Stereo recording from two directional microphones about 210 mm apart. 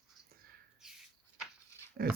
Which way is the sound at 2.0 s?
45° right (ahead or behind).